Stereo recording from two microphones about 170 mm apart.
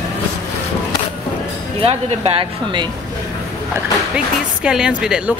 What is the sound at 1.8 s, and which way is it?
Speech, 35° right (ahead or behind).